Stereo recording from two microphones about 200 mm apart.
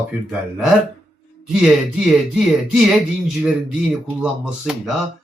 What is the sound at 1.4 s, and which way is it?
Speech, centre (ahead or behind).